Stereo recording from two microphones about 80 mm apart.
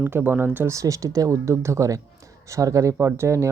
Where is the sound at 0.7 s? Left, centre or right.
Right.